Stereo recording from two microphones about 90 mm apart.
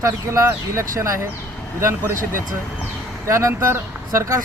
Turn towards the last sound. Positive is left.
turn(degrees=-35)  # may be behind; listen again after turning